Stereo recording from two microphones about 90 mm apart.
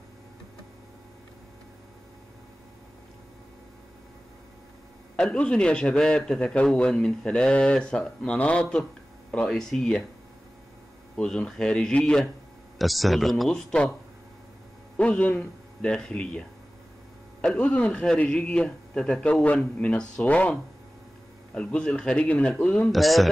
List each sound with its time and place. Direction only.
5.1 s a man's voice: 10° left (ahead or behind)
11.1 s a man's voice: 10° left (ahead or behind)
12.7 s speech: centre (ahead or behind)
15.0 s a man's voice: 15° left (ahead or behind)
21.5 s a man's voice: 10° left (ahead or behind)
22.8 s speech: centre (ahead or behind)